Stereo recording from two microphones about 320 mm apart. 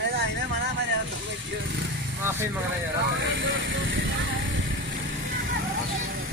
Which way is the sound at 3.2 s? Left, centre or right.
Right.